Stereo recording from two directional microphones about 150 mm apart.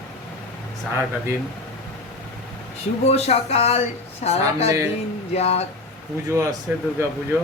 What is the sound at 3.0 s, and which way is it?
Speech, 45° left (ahead or behind).